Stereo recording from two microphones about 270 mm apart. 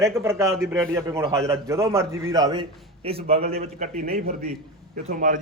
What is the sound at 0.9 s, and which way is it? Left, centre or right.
A man's voice, centre.